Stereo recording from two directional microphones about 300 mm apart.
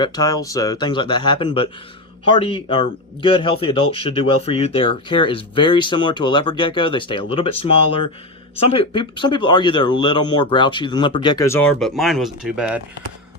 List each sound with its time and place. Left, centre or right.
0.0 s speech: centre